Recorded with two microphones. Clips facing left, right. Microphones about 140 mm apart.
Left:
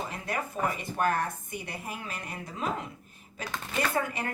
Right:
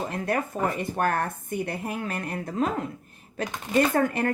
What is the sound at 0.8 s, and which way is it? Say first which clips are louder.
A woman's voice: right 3 dB; 50° right (ahead or behind).